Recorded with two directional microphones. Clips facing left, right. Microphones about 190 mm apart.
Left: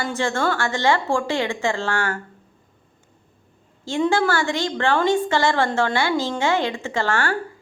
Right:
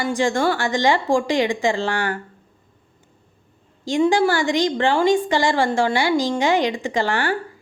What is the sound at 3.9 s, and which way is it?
A woman's voice, 15° right (ahead or behind).